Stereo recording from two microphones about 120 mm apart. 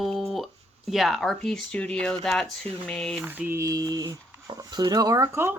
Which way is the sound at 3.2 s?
15° right (ahead or behind).